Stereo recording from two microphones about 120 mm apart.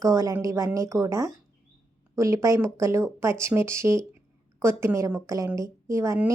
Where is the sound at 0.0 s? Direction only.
30° right (ahead or behind).